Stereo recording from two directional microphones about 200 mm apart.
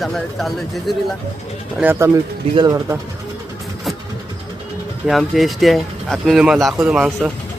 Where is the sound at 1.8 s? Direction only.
10° right (ahead or behind).